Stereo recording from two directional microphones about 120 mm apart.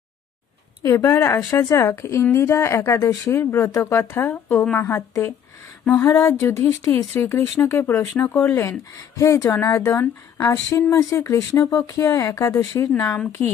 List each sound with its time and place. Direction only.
0.8 s speech: 30° left (ahead or behind)
13.4 s a woman's voice: 10° left (ahead or behind)